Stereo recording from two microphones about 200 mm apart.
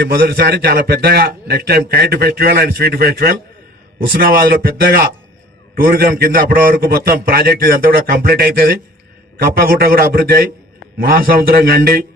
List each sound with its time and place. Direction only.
0.2 s a man's voice: 50° right (ahead or behind)